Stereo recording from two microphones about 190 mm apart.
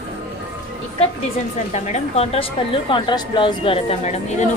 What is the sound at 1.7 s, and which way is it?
A woman's voice, 35° left (ahead or behind).